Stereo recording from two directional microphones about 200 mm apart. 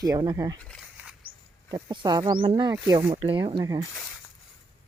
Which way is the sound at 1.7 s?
20° right (ahead or behind).